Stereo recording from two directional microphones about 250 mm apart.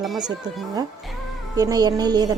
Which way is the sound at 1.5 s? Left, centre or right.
Centre.